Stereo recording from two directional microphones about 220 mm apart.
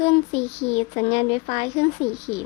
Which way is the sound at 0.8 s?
25° left (ahead or behind).